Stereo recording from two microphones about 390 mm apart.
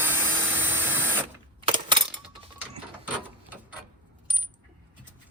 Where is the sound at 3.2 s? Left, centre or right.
Centre.